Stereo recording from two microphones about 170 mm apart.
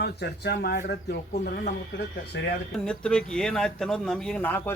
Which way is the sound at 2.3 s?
90° left.